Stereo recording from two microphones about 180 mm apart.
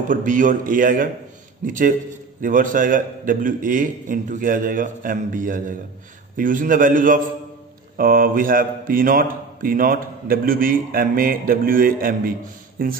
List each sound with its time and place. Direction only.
0.1 s a man's voice: 45° right (ahead or behind)